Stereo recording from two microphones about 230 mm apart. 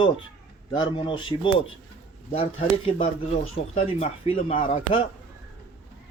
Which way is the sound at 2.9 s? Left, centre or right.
Left.